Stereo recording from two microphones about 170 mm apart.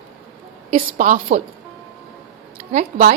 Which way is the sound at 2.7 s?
50° right (ahead or behind).